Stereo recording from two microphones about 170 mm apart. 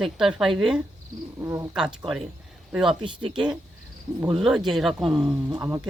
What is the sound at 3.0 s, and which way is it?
Speech, 30° right (ahead or behind).